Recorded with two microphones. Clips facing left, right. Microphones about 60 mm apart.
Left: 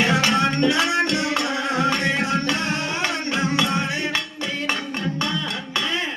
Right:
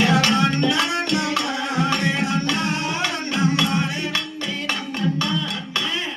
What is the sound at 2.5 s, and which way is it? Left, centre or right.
Tabla, left.